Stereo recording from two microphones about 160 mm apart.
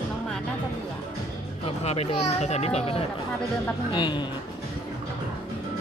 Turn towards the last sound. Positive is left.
turn(degrees=30)  # may be behind; listen again after turning